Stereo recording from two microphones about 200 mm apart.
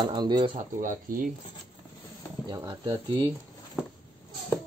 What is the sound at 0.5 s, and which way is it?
Speech, 40° right (ahead or behind).